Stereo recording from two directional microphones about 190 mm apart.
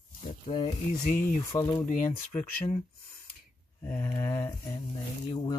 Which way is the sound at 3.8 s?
15° left (ahead or behind).